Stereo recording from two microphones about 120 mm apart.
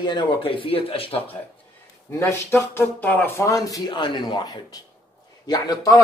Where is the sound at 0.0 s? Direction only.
40° left (ahead or behind).